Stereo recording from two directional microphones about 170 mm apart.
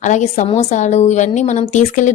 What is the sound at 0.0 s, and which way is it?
A woman's voice, 45° left (ahead or behind).